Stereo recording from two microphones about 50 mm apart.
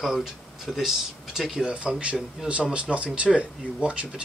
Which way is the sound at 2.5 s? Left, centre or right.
Right.